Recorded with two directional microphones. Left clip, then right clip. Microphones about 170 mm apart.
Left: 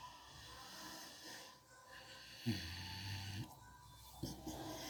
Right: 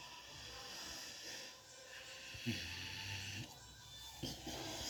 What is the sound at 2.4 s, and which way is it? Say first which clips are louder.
Snoring: right 1 dB; 45° left (ahead or behind).